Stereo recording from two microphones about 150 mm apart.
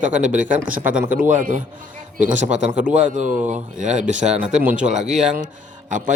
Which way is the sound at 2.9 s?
55° right (ahead or behind).